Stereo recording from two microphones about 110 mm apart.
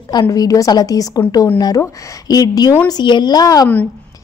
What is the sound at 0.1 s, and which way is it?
A woman's voice, 35° left (ahead or behind).